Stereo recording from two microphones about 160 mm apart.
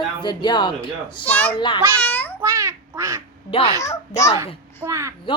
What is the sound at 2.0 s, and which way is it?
Speech, 10° left (ahead or behind).